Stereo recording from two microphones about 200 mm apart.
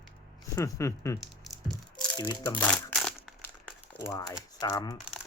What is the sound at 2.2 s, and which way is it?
Speech, 20° left (ahead or behind).